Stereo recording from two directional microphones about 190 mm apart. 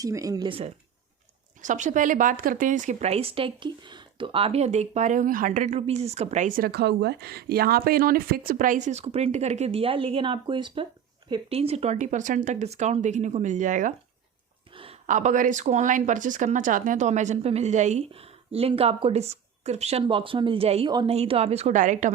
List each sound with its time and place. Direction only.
0.0 s speech: 20° right (ahead or behind)
1.6 s speech: 40° right (ahead or behind)
6.7 s speech: 60° right (ahead or behind); by 13.9 s 40° right (ahead or behind)
14.7 s a sound: 30° right (ahead or behind)
15.0 s speech: 40° right (ahead or behind)